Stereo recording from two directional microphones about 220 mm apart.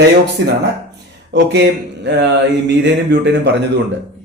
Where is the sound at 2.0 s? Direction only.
50° right (ahead or behind).